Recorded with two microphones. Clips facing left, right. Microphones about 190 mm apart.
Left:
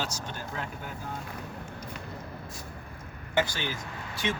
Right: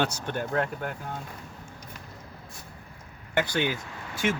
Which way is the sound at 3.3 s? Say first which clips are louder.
Right 3 dB; 60° right (ahead or behind).